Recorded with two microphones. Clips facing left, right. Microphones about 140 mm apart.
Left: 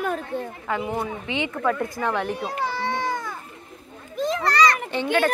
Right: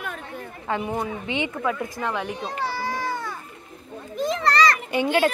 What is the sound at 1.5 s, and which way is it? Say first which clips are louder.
Speech: left 2 dB; 5° right (ahead or behind).